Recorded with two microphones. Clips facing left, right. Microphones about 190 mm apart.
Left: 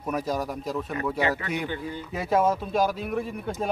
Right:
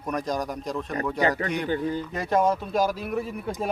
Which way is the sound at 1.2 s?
40° right (ahead or behind).